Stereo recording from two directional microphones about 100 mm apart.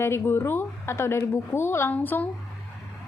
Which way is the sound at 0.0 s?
25° left (ahead or behind).